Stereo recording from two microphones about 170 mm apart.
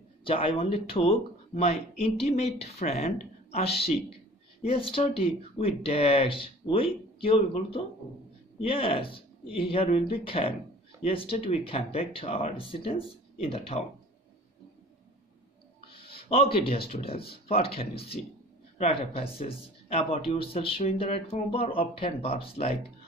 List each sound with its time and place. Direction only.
0.2 s speech: 30° left (ahead or behind)
15.9 s a sound: 30° left (ahead or behind)
16.5 s speech: 35° left (ahead or behind)